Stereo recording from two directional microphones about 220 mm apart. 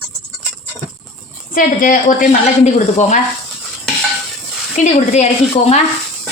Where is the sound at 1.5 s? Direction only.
40° left (ahead or behind).